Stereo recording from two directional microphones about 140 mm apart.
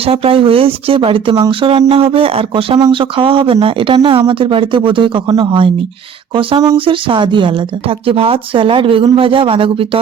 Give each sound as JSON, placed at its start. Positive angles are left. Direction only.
{"t": 0.0, "sound": "speech", "side_deg": -45}